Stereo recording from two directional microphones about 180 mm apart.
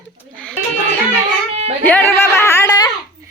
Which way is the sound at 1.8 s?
10° left (ahead or behind).